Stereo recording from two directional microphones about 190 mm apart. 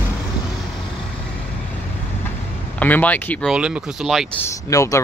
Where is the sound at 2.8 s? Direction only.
10° left (ahead or behind).